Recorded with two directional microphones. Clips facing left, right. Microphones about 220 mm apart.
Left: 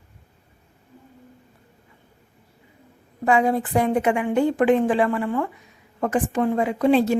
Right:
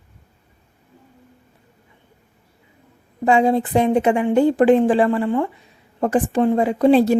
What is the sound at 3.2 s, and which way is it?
Speech, 25° right (ahead or behind).